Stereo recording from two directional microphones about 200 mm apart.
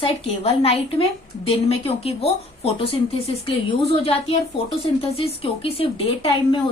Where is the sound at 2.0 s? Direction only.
30° left (ahead or behind).